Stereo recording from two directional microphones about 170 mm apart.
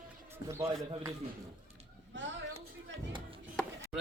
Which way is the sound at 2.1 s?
90° right.